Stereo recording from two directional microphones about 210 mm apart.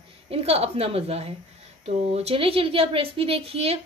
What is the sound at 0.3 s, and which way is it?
A woman's voice, 30° right (ahead or behind).